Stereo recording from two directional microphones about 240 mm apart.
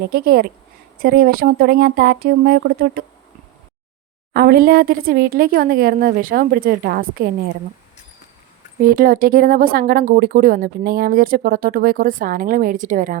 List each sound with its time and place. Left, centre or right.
0.0 s speech: right
4.4 s speech: right
8.8 s speech: right